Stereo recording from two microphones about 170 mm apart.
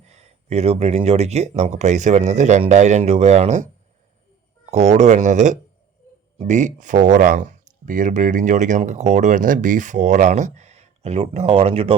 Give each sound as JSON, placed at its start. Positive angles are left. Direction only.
{"t": 0.0, "sound": "speech", "side_deg": -40}